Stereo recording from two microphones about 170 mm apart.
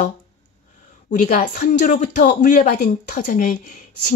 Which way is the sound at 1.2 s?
50° left (ahead or behind).